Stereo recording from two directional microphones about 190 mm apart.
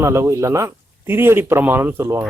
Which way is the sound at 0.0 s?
15° right (ahead or behind).